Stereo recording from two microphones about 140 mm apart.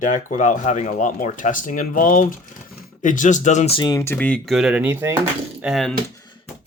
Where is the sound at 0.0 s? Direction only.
65° left (ahead or behind).